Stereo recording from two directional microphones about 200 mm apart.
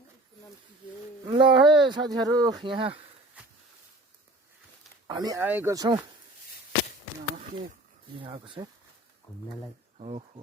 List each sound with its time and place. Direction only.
1.2 s a sound: 25° right (ahead or behind)
1.7 s speech: 20° right (ahead or behind)
5.0 s speech: 20° right (ahead or behind)
8.2 s speech: 25° right (ahead or behind)
10.0 s insect: 30° right (ahead or behind)